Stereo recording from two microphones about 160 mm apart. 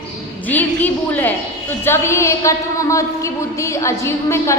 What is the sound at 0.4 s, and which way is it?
A woman's voice, 10° left (ahead or behind).